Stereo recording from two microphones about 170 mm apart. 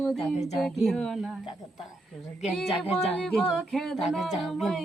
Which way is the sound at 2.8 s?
35° left (ahead or behind).